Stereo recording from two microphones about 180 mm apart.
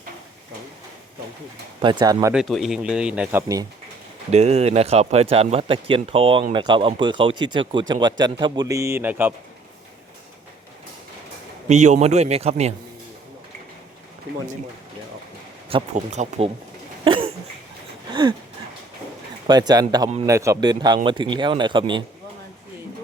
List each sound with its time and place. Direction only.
1.8 s a man's voice: 25° right (ahead or behind)
2.3 s a man's voice: centre (ahead or behind)
4.3 s a man's voice: 35° right (ahead or behind); by 9.3 s 10° right (ahead or behind)
11.7 s speech: 40° right (ahead or behind)
15.7 s speech: 40° right (ahead or behind)
17.0 s cough: 30° right (ahead or behind)
18.1 s a sound: 25° right (ahead or behind)
19.5 s a man's voice: 20° right (ahead or behind)